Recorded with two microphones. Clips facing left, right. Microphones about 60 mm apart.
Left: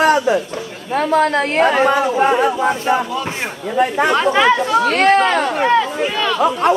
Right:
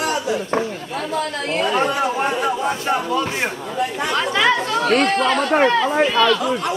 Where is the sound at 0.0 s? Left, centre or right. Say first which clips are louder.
Left 8 dB; left.